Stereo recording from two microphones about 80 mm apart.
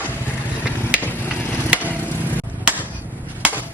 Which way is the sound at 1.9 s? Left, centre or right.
Left.